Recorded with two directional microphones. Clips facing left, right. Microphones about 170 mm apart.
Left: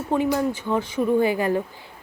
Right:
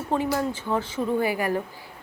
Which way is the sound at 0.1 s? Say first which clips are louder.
Left 3 dB; 15° left (ahead or behind).